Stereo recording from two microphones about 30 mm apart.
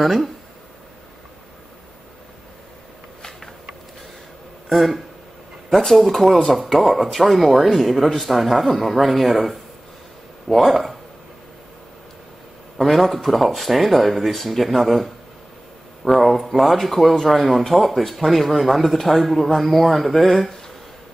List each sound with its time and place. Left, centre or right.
0.0 s speech: centre
3.2 s a sound: centre
4.6 s speech: centre
12.7 s speech: centre
17.3 s speech: centre